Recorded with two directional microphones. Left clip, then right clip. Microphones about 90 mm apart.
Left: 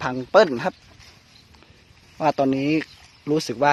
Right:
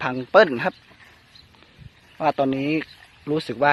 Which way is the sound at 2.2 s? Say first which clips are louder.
Left 1 dB; 45° left (ahead or behind).